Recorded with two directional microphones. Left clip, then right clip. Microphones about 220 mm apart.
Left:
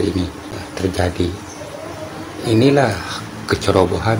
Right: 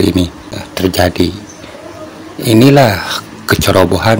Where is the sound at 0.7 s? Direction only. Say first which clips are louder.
Right 8 dB; 40° right (ahead or behind).